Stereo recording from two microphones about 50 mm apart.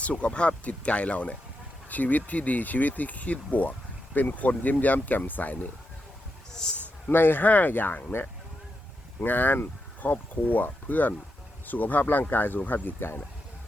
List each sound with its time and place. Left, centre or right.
0.0 s speech: left
6.5 s a man's voice: centre
7.1 s speech: left
9.2 s speech: left